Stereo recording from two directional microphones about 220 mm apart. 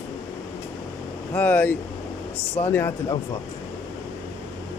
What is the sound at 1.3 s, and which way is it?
Speech, 5° left (ahead or behind).